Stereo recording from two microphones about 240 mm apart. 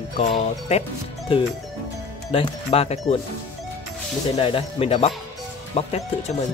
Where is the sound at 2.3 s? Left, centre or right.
Left.